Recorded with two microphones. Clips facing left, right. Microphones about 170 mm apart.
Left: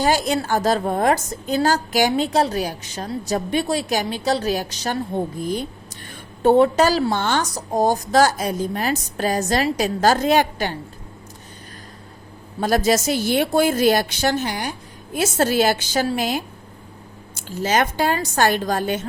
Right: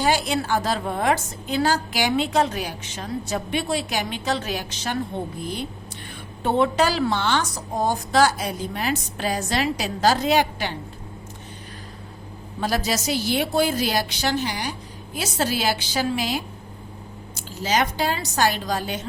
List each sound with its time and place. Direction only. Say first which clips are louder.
0.0 s a woman's voice: left 3 dB; 40° left (ahead or behind)
12.5 s a woman's voice: left 6 dB; 50° left (ahead or behind)